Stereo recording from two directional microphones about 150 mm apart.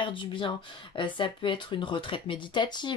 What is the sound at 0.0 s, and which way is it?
Speech, 30° left (ahead or behind).